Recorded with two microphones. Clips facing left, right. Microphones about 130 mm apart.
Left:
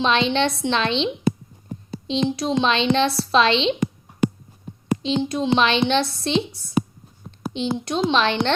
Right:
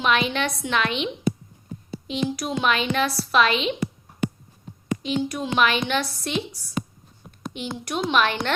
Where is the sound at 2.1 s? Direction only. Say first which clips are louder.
Left 4 dB; 25° left (ahead or behind).